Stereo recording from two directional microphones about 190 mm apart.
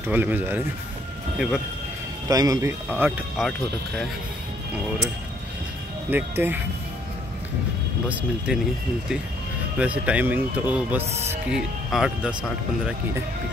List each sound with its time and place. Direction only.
0.1 s speech: 10° right (ahead or behind)
2.2 s speech: 20° right (ahead or behind)
3.4 s speech: centre (ahead or behind)
6.0 s speech: 10° right (ahead or behind)
8.1 s speech: 5° right (ahead or behind)
9.8 s speech: 5° right (ahead or behind)
11.1 s speech: 35° right (ahead or behind)
11.4 s speech: 5° right (ahead or behind)